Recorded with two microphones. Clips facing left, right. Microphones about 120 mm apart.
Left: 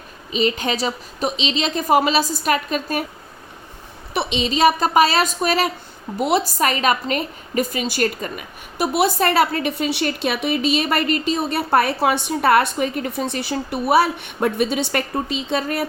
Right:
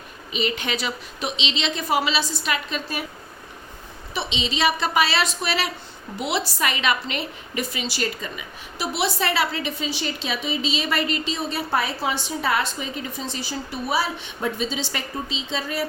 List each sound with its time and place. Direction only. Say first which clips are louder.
0.3 s a woman's voice: left 5 dB; 40° left (ahead or behind)
4.1 s a woman's voice: left 6 dB; 55° left (ahead or behind)